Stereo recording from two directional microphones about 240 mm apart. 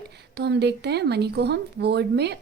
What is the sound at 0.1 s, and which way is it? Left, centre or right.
Speech, right.